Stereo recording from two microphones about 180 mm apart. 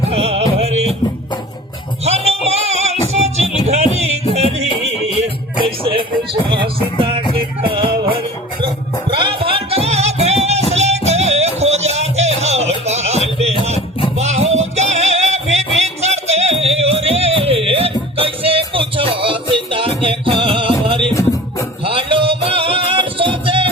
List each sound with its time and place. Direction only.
0.1 s music: 35° right (ahead or behind)
2.0 s music: 35° right (ahead or behind)
5.8 s music: 30° right (ahead or behind)
7.3 s music: 30° right (ahead or behind)